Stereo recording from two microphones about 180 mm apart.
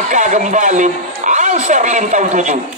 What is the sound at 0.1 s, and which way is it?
A man's voice, 45° right (ahead or behind).